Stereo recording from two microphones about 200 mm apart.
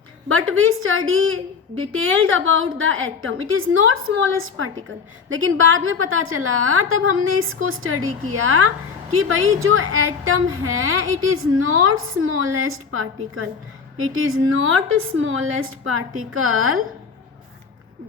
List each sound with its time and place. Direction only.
0.3 s a woman's voice: 90° right
5.3 s a woman's voice: 80° right